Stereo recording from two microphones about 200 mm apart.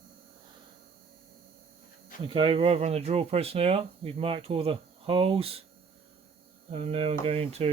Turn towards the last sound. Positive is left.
turn(degrees=-30)  # may be behind; listen again after turning